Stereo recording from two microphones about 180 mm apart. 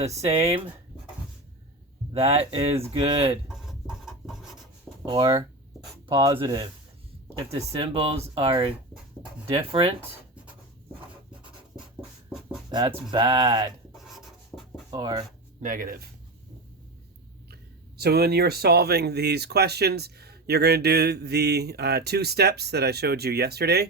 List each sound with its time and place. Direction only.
0.2 s speech: 30° right (ahead or behind)
2.1 s speech: 35° right (ahead or behind)
3.5 s rub: centre (ahead or behind)
5.0 s speech: 20° right (ahead or behind)
10.0 s writing: 5° right (ahead or behind)
12.3 s music: centre (ahead or behind)
12.7 s speech: 20° right (ahead or behind)
13.9 s writing: centre (ahead or behind)
14.8 s speech: 20° right (ahead or behind)
15.6 s speech: 50° right (ahead or behind)
17.5 s speech: 60° right (ahead or behind)